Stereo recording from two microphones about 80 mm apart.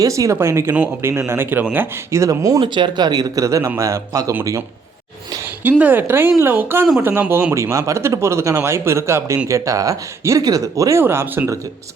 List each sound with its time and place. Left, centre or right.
0.0 s speech: right
2.6 s speech: right
5.8 s speech: right
7.5 s speech: right
11.0 s speech: right